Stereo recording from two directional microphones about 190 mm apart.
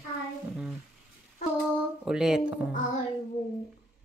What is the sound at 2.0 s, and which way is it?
Speech, 5° right (ahead or behind).